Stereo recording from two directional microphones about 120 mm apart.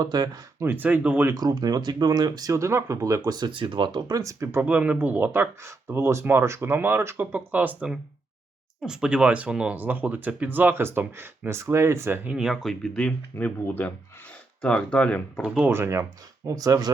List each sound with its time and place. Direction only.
0.0 s speech: 35° right (ahead or behind)
0.6 s speech: 15° right (ahead or behind)
1.3 s speech: 30° right (ahead or behind); by 15.2 s 10° left (ahead or behind)
15.4 s speech: 10° right (ahead or behind)
15.7 s speech: 20° right (ahead or behind)